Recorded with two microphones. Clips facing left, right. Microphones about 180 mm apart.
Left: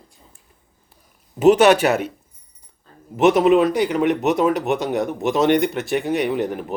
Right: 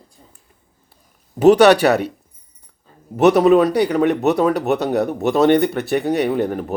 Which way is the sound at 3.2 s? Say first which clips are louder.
Right 2 dB; 40° right (ahead or behind).